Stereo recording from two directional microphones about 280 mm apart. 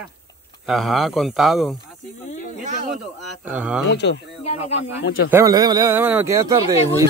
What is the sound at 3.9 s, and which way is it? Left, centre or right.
Speech, left.